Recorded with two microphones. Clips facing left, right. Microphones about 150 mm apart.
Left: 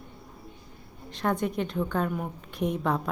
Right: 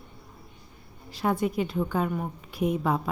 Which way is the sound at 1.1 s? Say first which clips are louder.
Right 1 dB; 5° right (ahead or behind).